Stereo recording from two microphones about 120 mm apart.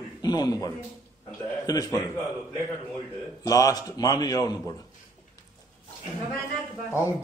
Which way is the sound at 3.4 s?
30° left (ahead or behind).